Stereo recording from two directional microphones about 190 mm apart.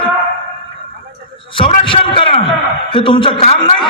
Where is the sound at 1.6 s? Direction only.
25° left (ahead or behind).